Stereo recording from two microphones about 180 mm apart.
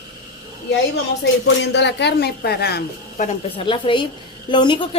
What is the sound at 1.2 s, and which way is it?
Speech, 75° left (ahead or behind).